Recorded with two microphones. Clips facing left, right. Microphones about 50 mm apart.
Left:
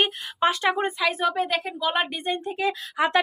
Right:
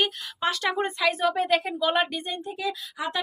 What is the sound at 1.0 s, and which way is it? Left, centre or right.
A woman's voice, centre.